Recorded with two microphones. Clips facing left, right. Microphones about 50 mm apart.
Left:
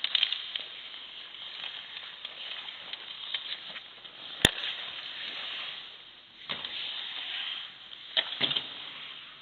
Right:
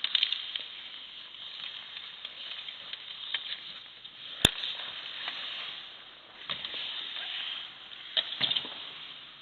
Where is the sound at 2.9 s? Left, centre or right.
Centre.